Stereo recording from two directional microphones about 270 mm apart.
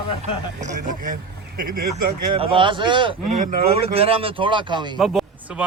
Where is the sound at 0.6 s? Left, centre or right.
Right.